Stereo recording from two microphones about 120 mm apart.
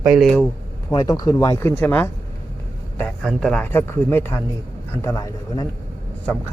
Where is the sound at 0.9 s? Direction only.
30° left (ahead or behind).